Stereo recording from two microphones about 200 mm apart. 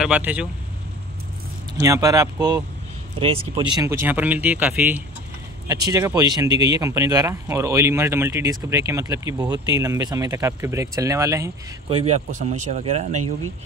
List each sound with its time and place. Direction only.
0.0 s speech: 5° right (ahead or behind)
1.8 s speech: 15° right (ahead or behind)
11.9 s speech: 30° right (ahead or behind)